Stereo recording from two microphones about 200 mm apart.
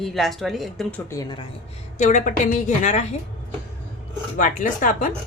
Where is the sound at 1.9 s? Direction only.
35° left (ahead or behind).